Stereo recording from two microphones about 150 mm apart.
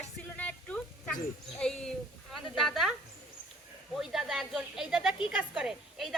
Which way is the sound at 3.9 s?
Centre (ahead or behind).